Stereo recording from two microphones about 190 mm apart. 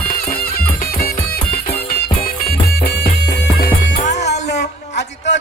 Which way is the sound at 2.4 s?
50° left (ahead or behind).